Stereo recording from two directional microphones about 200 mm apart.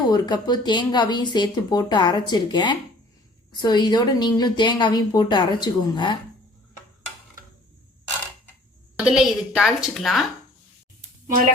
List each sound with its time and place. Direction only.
0.1 s a woman's voice: 20° left (ahead or behind)
9.0 s a woman's voice: 5° right (ahead or behind)